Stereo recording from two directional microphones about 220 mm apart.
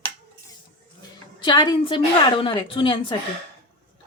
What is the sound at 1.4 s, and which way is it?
A woman's voice, 20° left (ahead or behind).